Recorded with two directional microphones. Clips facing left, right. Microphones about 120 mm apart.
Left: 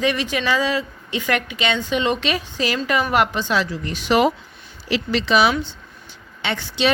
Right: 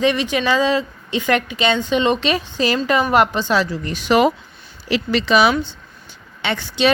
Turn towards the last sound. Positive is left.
turn(degrees=-50)  # may be behind; listen again after turning